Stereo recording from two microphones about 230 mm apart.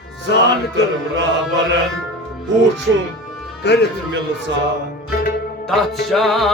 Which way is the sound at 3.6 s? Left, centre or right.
Left.